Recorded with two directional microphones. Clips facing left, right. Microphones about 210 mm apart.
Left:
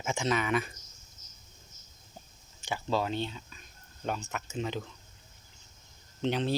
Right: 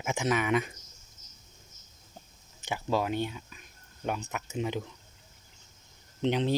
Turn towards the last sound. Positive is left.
turn(degrees=-15)  # may be behind; listen again after turning